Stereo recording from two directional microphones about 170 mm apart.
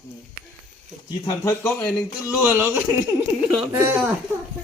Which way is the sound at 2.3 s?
10° right (ahead or behind).